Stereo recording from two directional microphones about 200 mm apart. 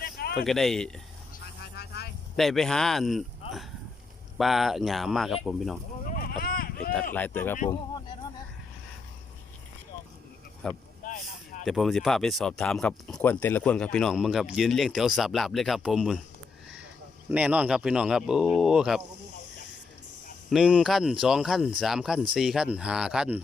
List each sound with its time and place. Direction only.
0.0 s a sound: 50° left (ahead or behind)
0.4 s speech: centre (ahead or behind)
1.6 s vehicle: 50° left (ahead or behind)
2.3 s speech: centre (ahead or behind)
4.4 s speech: centre (ahead or behind)
6.1 s a sound: 45° left (ahead or behind)
7.1 s speech: 10° left (ahead or behind)
10.6 s speech: 5° left (ahead or behind)
11.0 s boat: 40° left (ahead or behind)
11.6 s speech: centre (ahead or behind)
17.2 s speech: 5° right (ahead or behind)
20.5 s speech: 5° right (ahead or behind)